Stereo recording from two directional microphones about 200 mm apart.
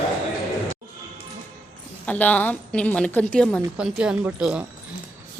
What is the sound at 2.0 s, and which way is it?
A woman's voice, 5° left (ahead or behind).